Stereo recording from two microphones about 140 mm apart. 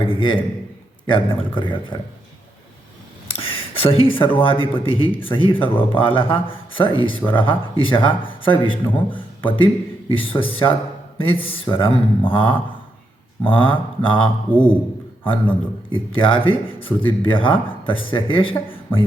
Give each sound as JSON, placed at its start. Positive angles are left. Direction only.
{"t": 0.0, "sound": "a man's voice", "side_deg": 35}
{"t": 3.2, "sound": "a sound", "side_deg": 40}
{"t": 4.4, "sound": "a man's voice", "side_deg": 40}
{"t": 14.5, "sound": "a man's voice", "side_deg": 10}
{"t": 15.2, "sound": "a man's voice", "side_deg": 35}